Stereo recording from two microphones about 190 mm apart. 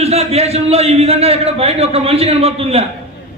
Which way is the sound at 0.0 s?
35° right (ahead or behind).